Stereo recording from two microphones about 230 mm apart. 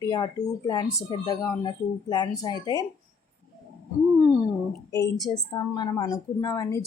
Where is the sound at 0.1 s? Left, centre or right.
Centre.